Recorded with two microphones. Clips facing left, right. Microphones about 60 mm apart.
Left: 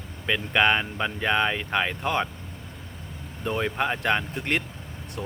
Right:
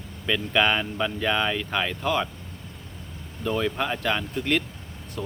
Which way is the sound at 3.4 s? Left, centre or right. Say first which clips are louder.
Even; left.